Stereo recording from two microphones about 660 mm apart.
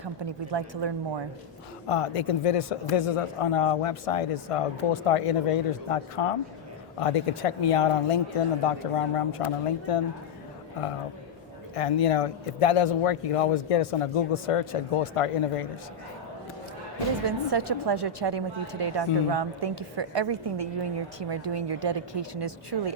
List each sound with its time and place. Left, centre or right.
0.5 s a woman's voice: right
1.9 s speech: left
11.7 s speech: left
17.2 s a woman's voice: right